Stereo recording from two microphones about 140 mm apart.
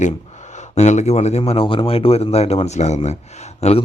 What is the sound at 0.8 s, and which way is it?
A man's voice, 55° left (ahead or behind).